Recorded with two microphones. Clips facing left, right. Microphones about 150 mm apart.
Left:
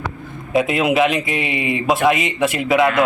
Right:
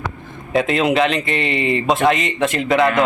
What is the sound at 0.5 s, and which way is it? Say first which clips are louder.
Speech: even; 5° left (ahead or behind).